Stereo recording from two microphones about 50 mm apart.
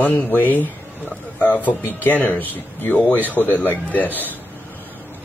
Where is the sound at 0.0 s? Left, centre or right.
Left.